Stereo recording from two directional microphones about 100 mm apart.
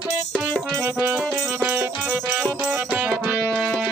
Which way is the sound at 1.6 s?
20° right (ahead or behind).